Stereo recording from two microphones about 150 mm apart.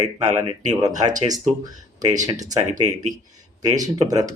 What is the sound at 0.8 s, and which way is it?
Speech, 25° right (ahead or behind).